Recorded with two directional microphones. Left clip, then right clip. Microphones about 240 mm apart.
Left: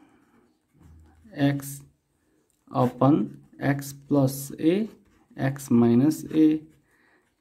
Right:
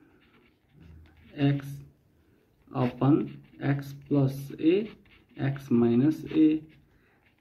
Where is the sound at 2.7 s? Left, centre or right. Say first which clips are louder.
Left 4 dB; left.